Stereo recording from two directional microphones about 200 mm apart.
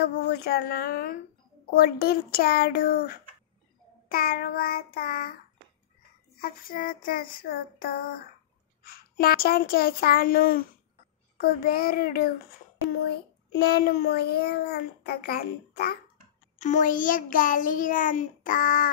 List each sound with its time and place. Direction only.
0.0 s a child's voice: 50° left (ahead or behind)
6.4 s a child's voice: 45° left (ahead or behind)
13.6 s a child's voice: 50° left (ahead or behind)
16.5 s a child's voice: 40° left (ahead or behind)